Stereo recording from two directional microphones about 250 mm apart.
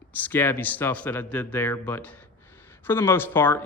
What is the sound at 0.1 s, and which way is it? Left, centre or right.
A man's voice, centre.